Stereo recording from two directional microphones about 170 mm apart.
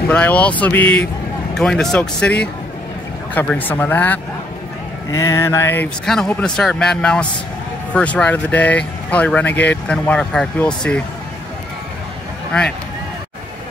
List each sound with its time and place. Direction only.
0.1 s a man's voice: 10° left (ahead or behind)
3.3 s speech: 10° left (ahead or behind)
6.0 s a man's voice: 5° left (ahead or behind)